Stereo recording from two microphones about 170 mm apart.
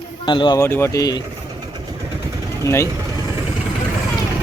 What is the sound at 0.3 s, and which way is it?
Speech, 30° left (ahead or behind).